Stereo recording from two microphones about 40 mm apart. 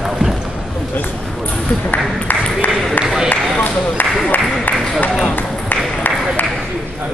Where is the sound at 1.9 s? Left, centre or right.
Left.